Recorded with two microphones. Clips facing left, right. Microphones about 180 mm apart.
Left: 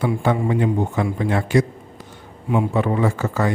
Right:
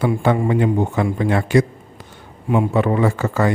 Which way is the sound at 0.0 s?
65° right (ahead or behind).